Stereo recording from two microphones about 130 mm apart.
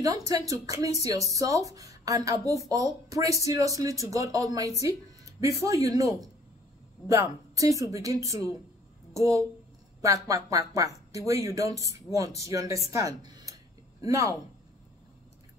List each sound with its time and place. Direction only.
0.0 s a woman's voice: 25° right (ahead or behind)